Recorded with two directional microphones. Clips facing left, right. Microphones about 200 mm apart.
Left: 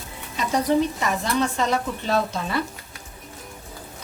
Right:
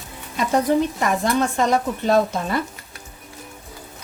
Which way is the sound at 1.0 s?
50° right (ahead or behind).